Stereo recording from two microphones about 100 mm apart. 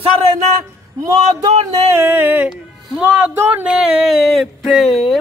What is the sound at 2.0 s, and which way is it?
Speech, 20° right (ahead or behind).